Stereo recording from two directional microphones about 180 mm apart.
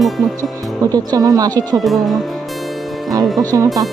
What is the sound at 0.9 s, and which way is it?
Speech, 20° right (ahead or behind).